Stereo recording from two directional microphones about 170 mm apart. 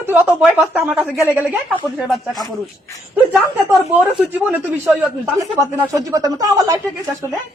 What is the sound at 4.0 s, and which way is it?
Speech, 10° right (ahead or behind).